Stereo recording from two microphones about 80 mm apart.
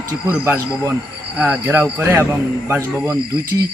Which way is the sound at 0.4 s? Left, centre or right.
Right.